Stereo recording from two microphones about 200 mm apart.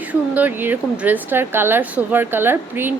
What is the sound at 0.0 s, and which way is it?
Speech, 10° right (ahead or behind).